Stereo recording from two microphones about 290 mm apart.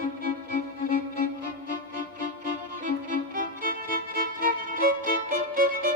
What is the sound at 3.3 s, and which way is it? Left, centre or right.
Music, right.